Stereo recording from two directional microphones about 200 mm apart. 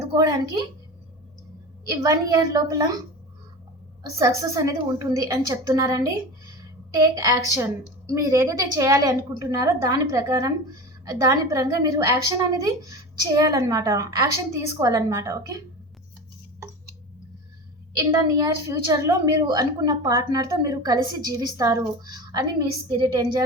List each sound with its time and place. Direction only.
0.2 s a sound: 15° right (ahead or behind)
1.9 s a woman's voice: 15° right (ahead or behind)
4.4 s a woman's voice: 15° right (ahead or behind)
17.9 s a woman's voice: 15° right (ahead or behind)